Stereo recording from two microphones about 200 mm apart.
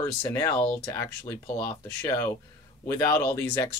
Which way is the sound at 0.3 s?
20° left (ahead or behind).